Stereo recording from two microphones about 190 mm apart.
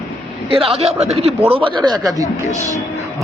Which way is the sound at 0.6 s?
30° right (ahead or behind).